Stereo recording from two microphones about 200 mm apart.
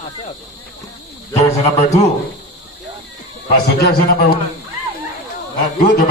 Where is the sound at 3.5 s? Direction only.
55° left (ahead or behind).